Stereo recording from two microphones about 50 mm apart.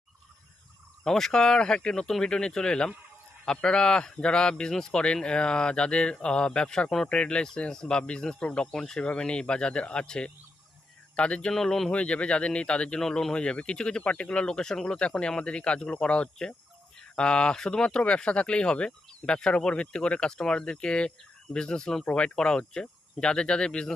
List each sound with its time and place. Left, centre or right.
1.0 s speech: centre
8.6 s speech: centre
11.5 s speech: centre
11.9 s speech: left